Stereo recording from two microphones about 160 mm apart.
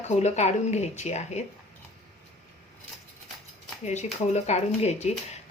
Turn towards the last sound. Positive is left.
turn(degrees=45)  # may be behind; listen again after turning